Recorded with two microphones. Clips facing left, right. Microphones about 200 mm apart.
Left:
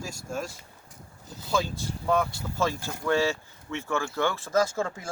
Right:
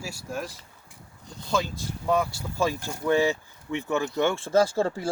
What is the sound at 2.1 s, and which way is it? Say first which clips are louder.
Speech: right 1 dB; 10° right (ahead or behind).